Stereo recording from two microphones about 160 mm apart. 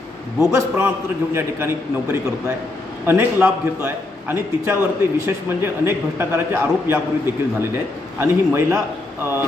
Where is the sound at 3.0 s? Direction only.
15° right (ahead or behind).